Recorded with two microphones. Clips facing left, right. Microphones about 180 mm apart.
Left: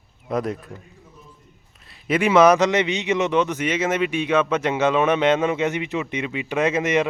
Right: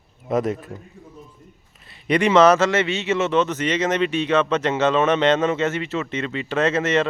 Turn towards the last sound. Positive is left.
turn(degrees=10)  # may be behind; listen again after turning